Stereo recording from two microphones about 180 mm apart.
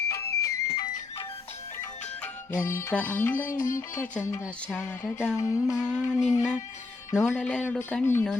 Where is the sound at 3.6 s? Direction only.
45° left (ahead or behind).